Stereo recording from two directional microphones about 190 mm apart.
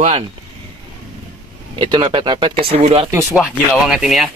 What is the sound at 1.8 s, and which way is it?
Speech, 25° right (ahead or behind).